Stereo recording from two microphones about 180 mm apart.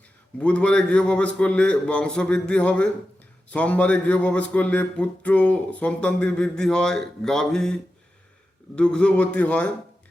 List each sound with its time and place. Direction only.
0.3 s speech: 5° left (ahead or behind)